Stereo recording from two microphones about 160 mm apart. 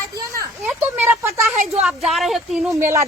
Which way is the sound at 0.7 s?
15° right (ahead or behind).